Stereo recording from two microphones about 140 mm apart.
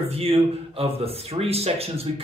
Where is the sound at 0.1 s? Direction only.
45° right (ahead or behind).